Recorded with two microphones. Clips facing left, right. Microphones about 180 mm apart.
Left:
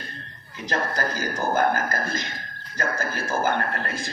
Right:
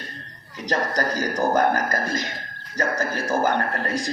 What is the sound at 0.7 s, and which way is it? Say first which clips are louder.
Speech: right 3 dB; 40° right (ahead or behind).